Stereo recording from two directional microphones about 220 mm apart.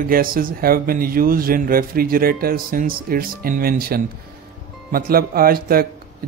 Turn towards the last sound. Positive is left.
turn(degrees=-40)  # may be behind; listen again after turning